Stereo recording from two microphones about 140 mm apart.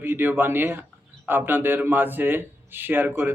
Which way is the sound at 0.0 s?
15° right (ahead or behind).